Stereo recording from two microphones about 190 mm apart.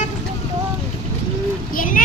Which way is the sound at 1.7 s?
45° left (ahead or behind).